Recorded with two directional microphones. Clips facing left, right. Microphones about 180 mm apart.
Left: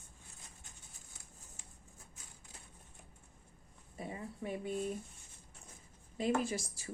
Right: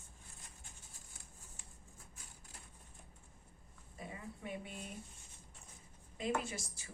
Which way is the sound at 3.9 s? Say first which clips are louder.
Left 5 dB; 30° left (ahead or behind).